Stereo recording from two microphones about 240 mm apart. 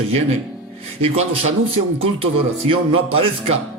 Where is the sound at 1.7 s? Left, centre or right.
Right.